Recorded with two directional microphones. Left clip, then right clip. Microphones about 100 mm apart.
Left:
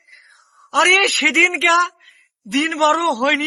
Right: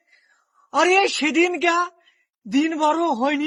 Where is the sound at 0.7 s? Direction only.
40° right (ahead or behind).